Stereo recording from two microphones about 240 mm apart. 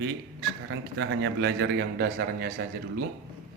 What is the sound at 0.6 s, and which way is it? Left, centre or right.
A man's voice, right.